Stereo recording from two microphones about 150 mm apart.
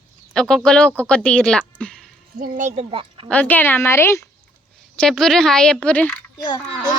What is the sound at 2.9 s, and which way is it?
Speech, 35° right (ahead or behind).